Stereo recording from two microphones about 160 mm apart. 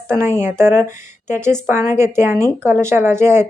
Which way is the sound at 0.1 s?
15° right (ahead or behind).